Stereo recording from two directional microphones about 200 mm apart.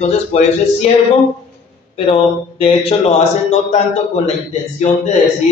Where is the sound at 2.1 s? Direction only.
30° left (ahead or behind).